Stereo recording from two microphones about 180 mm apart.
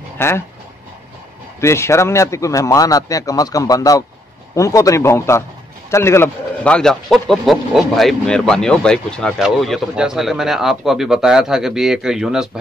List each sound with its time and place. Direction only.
0.2 s speech: 15° left (ahead or behind)
1.6 s a man's voice: 15° left (ahead or behind); by 12.4 s 5° right (ahead or behind)